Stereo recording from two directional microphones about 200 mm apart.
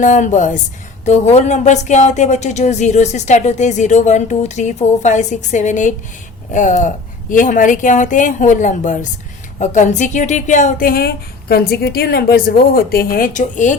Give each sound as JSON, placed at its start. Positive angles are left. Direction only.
{"t": 0.0, "sound": "a woman's voice", "side_deg": 40}